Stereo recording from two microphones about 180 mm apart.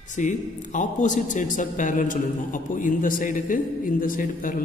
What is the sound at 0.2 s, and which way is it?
A man's voice, 45° left (ahead or behind).